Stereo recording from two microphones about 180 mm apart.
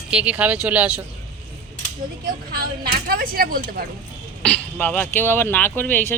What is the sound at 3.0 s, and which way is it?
Speech, 55° right (ahead or behind).